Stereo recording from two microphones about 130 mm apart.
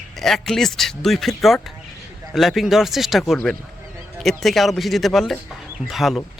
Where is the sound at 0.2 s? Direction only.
5° left (ahead or behind).